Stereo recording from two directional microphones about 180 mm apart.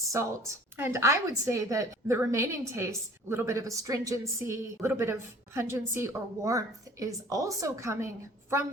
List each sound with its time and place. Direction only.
0.1 s a woman's voice: 15° right (ahead or behind)